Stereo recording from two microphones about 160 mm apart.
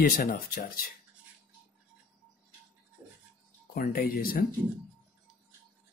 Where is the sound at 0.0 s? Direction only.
60° left (ahead or behind).